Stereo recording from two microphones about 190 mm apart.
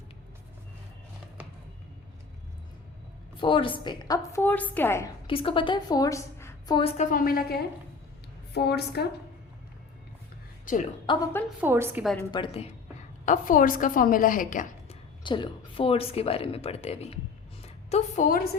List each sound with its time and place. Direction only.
3.4 s a woman's voice: 25° left (ahead or behind); by 5.0 s 10° left (ahead or behind)
5.3 s a woman's voice: 30° left (ahead or behind)
6.9 s a woman's voice: 40° left (ahead or behind); by 9.0 s 60° left (ahead or behind)
10.7 s a woman's voice: 45° left (ahead or behind)
11.0 s speech: 25° left (ahead or behind)
11.6 s a woman's voice: 10° right (ahead or behind)
12.3 s speech: 30° left (ahead or behind)
13.2 s a woman's voice: 45° left (ahead or behind)
15.2 s a woman's voice: 25° left (ahead or behind)